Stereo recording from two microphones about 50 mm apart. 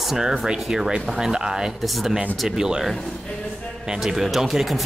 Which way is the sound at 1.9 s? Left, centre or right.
Centre.